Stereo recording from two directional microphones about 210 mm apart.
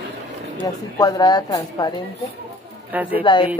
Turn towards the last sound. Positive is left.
turn(degrees=20)  # may be behind; listen again after turning